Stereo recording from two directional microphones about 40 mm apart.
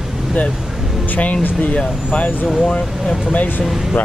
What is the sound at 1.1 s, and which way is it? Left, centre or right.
Speech, left.